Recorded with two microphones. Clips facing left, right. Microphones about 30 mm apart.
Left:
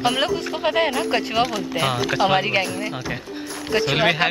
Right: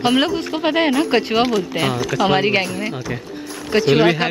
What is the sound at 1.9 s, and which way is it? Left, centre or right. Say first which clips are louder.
Speech: right 1 dB; left.